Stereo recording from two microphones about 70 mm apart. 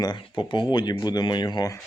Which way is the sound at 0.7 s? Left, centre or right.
Left.